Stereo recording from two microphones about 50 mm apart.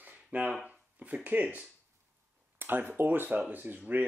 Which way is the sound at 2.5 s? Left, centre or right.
Right.